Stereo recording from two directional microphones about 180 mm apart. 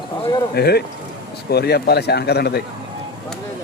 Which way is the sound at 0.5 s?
65° left (ahead or behind).